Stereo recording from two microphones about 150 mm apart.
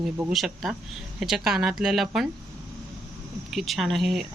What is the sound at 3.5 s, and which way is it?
Speech, centre (ahead or behind).